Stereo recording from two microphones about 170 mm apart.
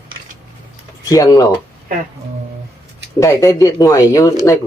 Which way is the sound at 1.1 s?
20° left (ahead or behind).